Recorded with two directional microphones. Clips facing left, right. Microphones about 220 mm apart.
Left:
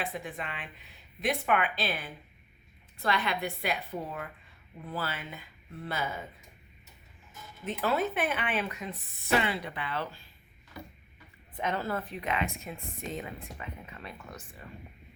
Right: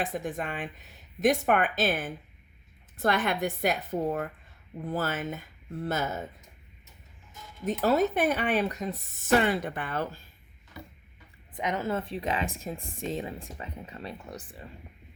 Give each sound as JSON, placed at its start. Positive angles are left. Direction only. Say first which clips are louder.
{"t": 0.0, "sound": "speech", "louder": "right 5 dB", "side_deg": -45}
{"t": 7.6, "sound": "speech", "louder": "right 5 dB", "side_deg": -40}
{"t": 11.5, "sound": "speech", "louder": "right 2 dB", "side_deg": -15}